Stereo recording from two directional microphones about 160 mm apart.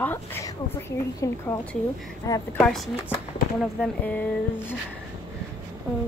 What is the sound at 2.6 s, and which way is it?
Speech, centre (ahead or behind).